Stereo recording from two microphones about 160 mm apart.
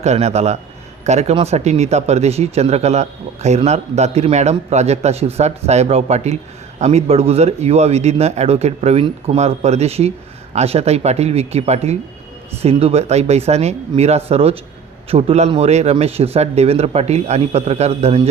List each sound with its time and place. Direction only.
0.0 s a man's voice: 45° right (ahead or behind)